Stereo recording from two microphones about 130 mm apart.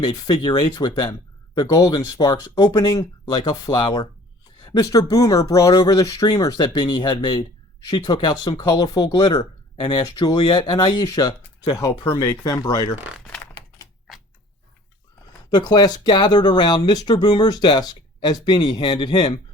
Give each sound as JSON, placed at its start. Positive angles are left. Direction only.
{"t": 0.0, "sound": "speech", "side_deg": 30}
{"t": 3.8, "sound": "speech", "side_deg": 40}
{"t": 4.6, "sound": "speech", "side_deg": 25}
{"t": 13.1, "sound": "typing", "side_deg": 5}
{"t": 13.4, "sound": "typewriter", "side_deg": 20}
{"t": 15.3, "sound": "speech", "side_deg": 30}